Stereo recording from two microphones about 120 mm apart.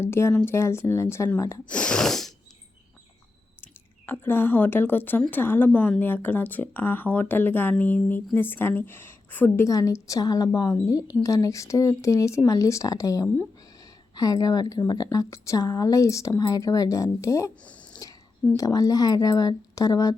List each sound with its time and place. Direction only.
0.0 s a woman's voice: 20° left (ahead or behind)
1.6 s speech: 10° left (ahead or behind)
3.6 s speech: 15° left (ahead or behind)
9.6 s a woman's voice: 30° left (ahead or behind)
18.0 s a sound: 30° left (ahead or behind)
18.5 s a woman's voice: 30° left (ahead or behind)